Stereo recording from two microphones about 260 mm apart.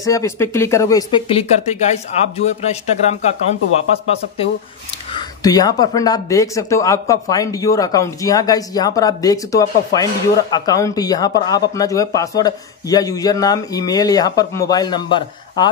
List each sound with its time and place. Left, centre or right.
0.0 s speech: centre
5.1 s speech: centre